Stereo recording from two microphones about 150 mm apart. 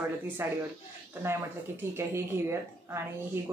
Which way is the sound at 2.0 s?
15° right (ahead or behind).